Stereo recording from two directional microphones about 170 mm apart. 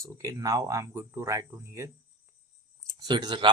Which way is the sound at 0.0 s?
20° right (ahead or behind).